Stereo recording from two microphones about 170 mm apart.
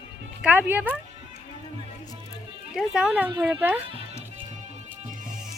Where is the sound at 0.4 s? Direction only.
10° right (ahead or behind).